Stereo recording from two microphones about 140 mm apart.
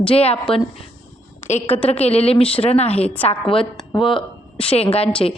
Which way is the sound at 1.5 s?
55° left (ahead or behind).